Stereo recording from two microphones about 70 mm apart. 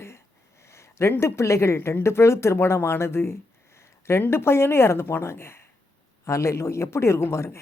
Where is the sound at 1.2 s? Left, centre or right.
Left.